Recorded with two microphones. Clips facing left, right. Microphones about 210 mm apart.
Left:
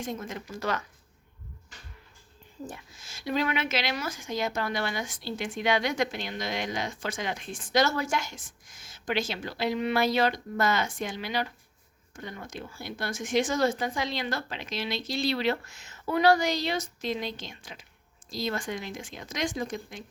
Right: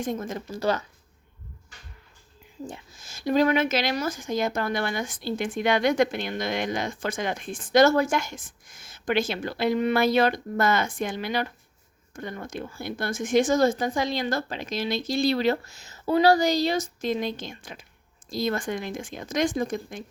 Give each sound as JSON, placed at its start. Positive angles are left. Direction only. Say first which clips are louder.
{"t": 0.0, "sound": "speech", "louder": "right 5 dB", "side_deg": -50}
{"t": 2.9, "sound": "speech", "louder": "right 7 dB", "side_deg": -45}